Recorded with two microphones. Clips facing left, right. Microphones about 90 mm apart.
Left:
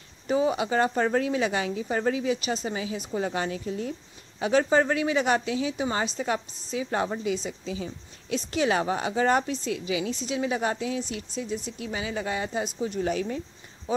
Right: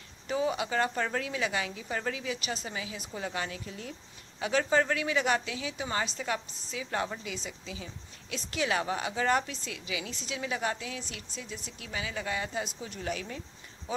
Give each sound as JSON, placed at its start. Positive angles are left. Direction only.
{"t": 0.3, "sound": "a woman's voice", "side_deg": 25}